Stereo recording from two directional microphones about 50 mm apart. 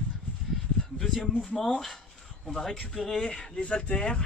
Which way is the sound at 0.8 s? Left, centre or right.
Centre.